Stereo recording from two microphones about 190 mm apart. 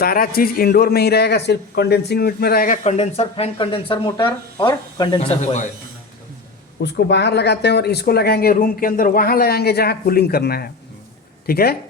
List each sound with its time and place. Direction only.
0.0 s a man's voice: 50° left (ahead or behind)
6.8 s a man's voice: 60° left (ahead or behind)